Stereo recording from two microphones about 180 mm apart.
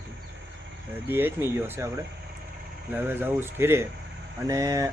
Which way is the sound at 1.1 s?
10° right (ahead or behind).